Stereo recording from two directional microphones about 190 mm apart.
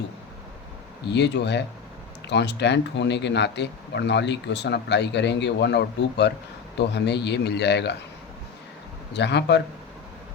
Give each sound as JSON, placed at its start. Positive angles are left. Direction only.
{"t": 1.0, "sound": "speech", "side_deg": 65}
{"t": 9.1, "sound": "speech", "side_deg": 65}